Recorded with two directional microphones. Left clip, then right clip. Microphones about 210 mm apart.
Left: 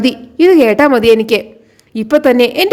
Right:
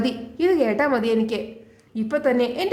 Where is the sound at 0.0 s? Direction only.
35° left (ahead or behind).